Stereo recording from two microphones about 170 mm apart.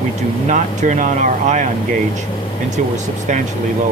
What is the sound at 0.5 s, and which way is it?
Speech, 45° right (ahead or behind).